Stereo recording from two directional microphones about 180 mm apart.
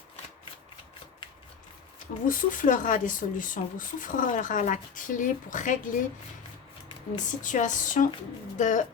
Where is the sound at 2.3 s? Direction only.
50° left (ahead or behind).